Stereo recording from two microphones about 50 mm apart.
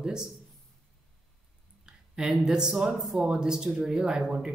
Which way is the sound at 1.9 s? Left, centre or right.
Centre.